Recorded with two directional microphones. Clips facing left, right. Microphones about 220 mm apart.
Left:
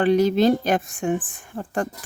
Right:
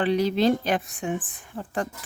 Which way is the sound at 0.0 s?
45° left (ahead or behind).